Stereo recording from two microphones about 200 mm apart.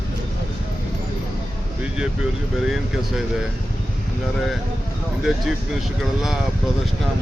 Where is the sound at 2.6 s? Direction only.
Centre (ahead or behind).